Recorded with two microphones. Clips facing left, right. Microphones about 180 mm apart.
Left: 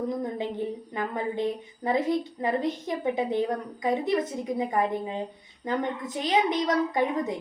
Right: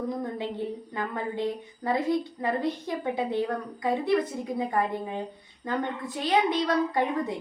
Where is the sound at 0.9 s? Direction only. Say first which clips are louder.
Left 2 dB; 20° left (ahead or behind).